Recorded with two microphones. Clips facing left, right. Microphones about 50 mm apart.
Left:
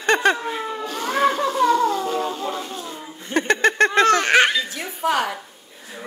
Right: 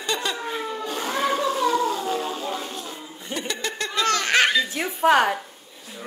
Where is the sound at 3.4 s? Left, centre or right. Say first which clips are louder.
Left 12 dB; left.